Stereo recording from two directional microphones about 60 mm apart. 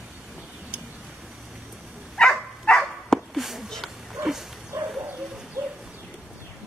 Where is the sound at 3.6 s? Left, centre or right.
Centre.